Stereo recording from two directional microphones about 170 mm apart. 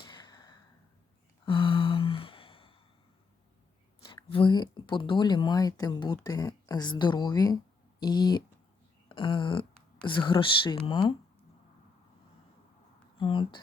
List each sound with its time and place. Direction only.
0.0 s sigh: 25° left (ahead or behind)
1.5 s a sound: 30° left (ahead or behind)
4.1 s speech: 30° left (ahead or behind)
9.0 s a sound: 30° left (ahead or behind)
10.0 s speech: 30° left (ahead or behind)
13.1 s speech: 30° left (ahead or behind)